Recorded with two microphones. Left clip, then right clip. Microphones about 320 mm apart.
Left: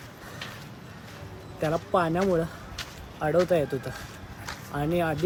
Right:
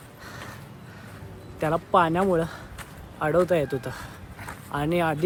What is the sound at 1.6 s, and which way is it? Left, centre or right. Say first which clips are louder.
A man's voice: right 4 dB; centre.